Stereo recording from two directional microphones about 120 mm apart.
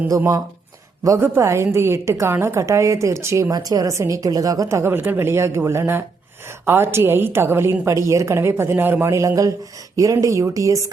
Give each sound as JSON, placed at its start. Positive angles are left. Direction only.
{"t": 0.1, "sound": "a woman's voice", "side_deg": -30}